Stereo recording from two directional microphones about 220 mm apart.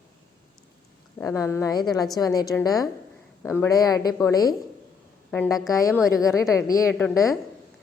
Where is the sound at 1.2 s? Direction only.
15° left (ahead or behind).